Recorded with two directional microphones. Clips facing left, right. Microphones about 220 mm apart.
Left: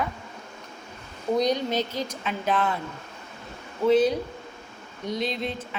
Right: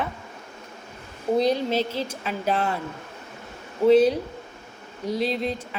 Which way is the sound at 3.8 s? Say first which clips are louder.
Right 4 dB; 40° right (ahead or behind).